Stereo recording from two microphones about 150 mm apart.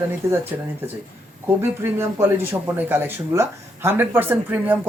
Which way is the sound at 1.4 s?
15° right (ahead or behind).